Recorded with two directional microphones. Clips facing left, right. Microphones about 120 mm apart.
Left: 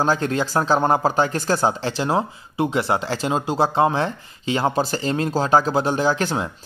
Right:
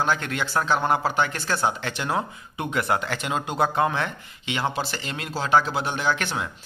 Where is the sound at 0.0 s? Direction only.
35° left (ahead or behind).